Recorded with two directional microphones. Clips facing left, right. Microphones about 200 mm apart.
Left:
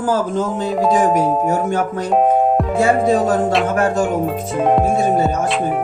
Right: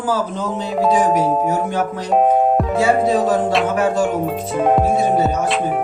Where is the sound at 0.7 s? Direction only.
5° right (ahead or behind).